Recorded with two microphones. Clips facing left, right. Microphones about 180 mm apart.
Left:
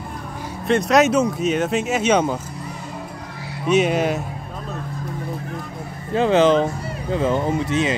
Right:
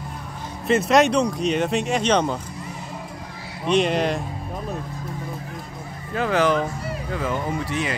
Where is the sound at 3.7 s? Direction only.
5° left (ahead or behind).